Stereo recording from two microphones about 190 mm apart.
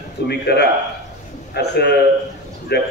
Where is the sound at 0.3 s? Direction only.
60° left (ahead or behind).